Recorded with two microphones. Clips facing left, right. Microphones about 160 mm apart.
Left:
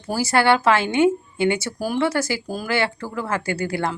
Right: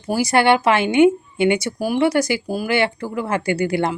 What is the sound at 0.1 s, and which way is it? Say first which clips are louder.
Speech: right 2 dB; 15° right (ahead or behind).